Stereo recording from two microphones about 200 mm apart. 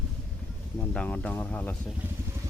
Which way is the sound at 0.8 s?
5° left (ahead or behind).